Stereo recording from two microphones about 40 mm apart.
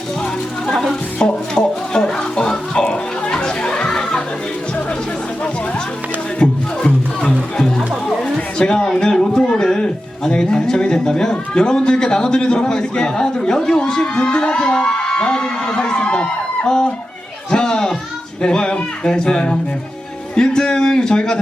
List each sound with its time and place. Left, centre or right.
0.7 s speech: centre
1.2 s speech: left
1.5 s children playing: centre
6.4 s music: left
8.5 s a sound: centre
9.0 s speech: centre
17.5 s a sound: left
18.4 s speech: left
20.3 s a sound: centre